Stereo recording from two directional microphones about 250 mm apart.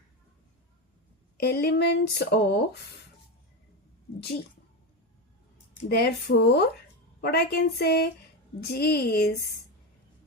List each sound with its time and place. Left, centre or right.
1.4 s speech: left
5.9 s speech: left